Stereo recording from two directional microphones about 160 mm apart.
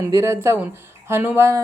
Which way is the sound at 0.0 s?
20° right (ahead or behind).